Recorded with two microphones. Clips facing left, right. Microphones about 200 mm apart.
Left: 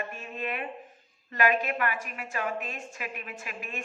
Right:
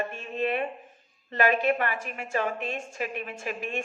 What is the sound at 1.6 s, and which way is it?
A woman's voice, 40° right (ahead or behind).